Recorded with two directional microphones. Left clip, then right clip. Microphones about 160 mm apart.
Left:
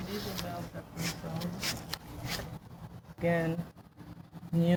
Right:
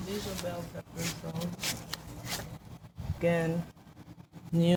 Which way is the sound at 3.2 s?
40° right (ahead or behind).